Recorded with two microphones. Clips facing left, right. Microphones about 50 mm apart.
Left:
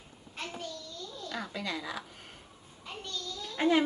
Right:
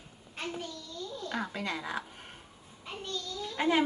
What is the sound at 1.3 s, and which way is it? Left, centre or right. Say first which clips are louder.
Speech: right 1 dB; right.